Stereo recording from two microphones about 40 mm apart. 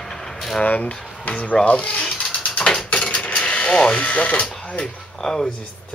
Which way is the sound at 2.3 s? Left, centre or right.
Left.